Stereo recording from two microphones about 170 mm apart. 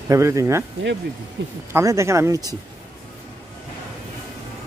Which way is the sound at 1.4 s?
90° right.